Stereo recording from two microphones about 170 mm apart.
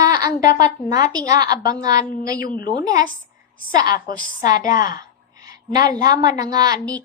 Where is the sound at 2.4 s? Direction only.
55° left (ahead or behind).